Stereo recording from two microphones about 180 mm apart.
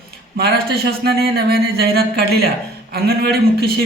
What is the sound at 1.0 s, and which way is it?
A woman's voice, 60° right (ahead or behind).